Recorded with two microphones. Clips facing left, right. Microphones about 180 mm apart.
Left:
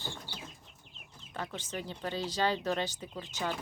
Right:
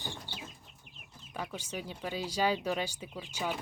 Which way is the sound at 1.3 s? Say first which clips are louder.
Even; 10° right (ahead or behind).